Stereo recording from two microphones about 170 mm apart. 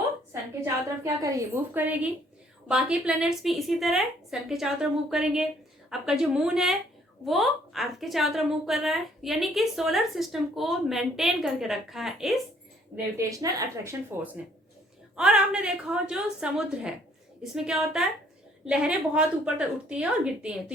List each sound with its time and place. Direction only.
0.6 s a woman's voice: 15° right (ahead or behind); by 12.3 s centre (ahead or behind)
13.1 s a woman's voice: 20° right (ahead or behind)
15.1 s a woman's voice: 5° right (ahead or behind)